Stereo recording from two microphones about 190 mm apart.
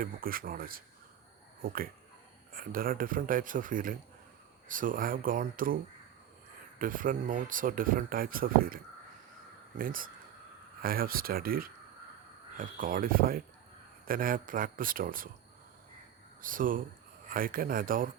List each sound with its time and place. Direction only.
0.0 s speech: 50° right (ahead or behind)
16.4 s speech: 45° right (ahead or behind)